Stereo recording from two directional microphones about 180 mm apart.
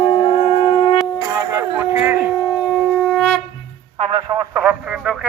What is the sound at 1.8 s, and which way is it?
Howl, 10° right (ahead or behind).